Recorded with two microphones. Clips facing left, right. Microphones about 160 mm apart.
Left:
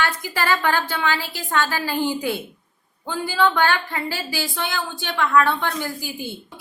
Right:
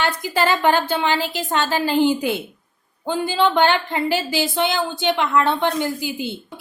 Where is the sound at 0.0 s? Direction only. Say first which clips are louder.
Right 4 dB; 20° right (ahead or behind).